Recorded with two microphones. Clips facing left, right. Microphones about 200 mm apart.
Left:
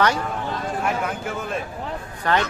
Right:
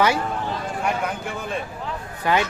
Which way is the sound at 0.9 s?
Centre (ahead or behind).